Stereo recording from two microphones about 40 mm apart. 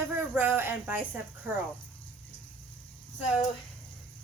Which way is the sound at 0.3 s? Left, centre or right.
Right.